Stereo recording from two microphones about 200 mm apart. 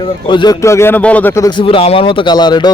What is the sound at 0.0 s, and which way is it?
Speech, 25° left (ahead or behind).